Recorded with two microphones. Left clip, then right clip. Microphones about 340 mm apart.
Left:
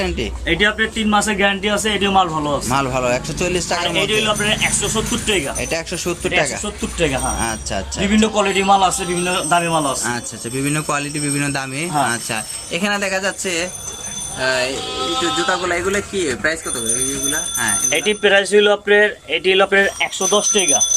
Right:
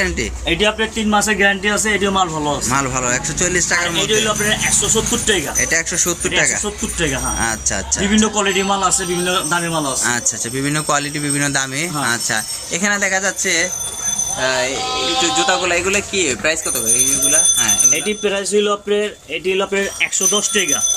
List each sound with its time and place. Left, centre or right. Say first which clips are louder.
0.5 s speech: left 1 dB; centre
8.1 s a man's voice: left 1 dB; centre
12.8 s speech: right 2 dB; centre
17.9 s speech: left 5 dB; left